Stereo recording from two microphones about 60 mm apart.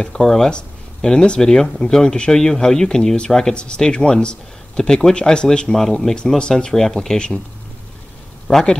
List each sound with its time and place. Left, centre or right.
0.0 s speech: centre
8.5 s speech: centre